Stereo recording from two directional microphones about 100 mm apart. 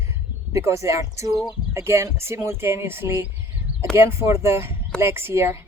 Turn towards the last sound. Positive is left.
turn(degrees=-25)  # may be behind; listen again after turning